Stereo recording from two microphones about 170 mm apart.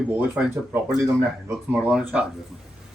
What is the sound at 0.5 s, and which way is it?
Speech, 15° right (ahead or behind).